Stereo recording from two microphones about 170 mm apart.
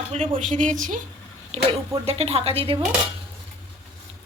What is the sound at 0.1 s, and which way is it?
Speech, 45° right (ahead or behind).